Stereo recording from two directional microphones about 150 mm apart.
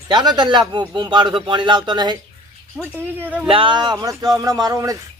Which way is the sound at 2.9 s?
10° right (ahead or behind).